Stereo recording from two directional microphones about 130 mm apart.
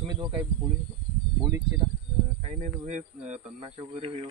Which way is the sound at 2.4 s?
60° right (ahead or behind).